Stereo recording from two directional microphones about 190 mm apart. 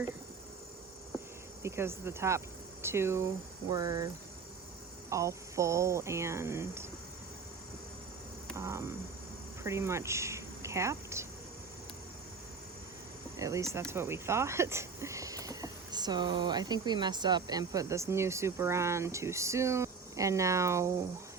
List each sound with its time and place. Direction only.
1.6 s speech: 15° right (ahead or behind)
8.5 s a sound: 15° right (ahead or behind)
9.6 s speech: 15° right (ahead or behind)
13.4 s speech: 15° right (ahead or behind)